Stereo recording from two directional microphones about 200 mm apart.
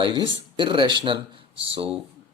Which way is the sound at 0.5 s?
25° right (ahead or behind).